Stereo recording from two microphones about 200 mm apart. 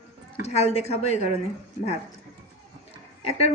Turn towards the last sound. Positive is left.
turn(degrees=30)  # may be behind; listen again after turning